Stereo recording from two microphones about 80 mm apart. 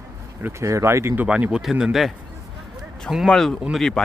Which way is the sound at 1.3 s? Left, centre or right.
Centre.